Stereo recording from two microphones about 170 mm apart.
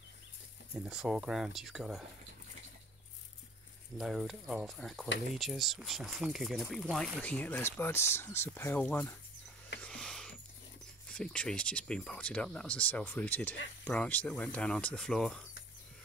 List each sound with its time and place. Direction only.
0.8 s speech: 5° right (ahead or behind)
4.0 s speech: centre (ahead or behind)
9.8 s a sound: 5° left (ahead or behind)
11.1 s speech: 5° left (ahead or behind)